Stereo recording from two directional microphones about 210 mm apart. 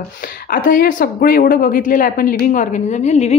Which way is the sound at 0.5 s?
40° left (ahead or behind).